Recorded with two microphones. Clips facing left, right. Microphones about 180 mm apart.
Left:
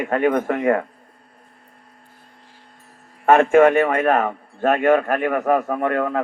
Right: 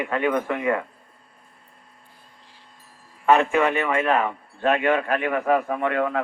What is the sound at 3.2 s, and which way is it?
Speech, 50° left (ahead or behind).